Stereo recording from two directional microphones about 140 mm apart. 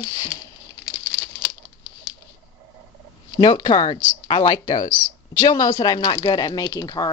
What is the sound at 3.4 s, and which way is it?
Speech, 30° left (ahead or behind).